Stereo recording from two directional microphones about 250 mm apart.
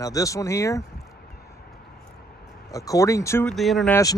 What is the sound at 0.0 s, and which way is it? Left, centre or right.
Speech, centre.